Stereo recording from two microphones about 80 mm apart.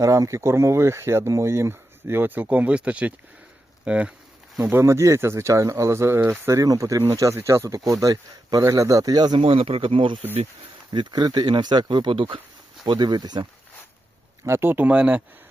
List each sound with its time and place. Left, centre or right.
0.0 s speech: right; by 4.1 s centre
4.6 s speech: right
8.0 s speech: right
8.6 s speech: right
10.9 s speech: right
12.8 s speech: right
14.4 s speech: right; by 15.2 s centre